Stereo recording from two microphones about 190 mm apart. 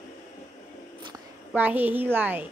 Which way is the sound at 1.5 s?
10° right (ahead or behind).